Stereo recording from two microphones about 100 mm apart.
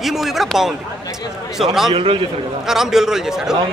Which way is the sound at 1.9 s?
60° right (ahead or behind).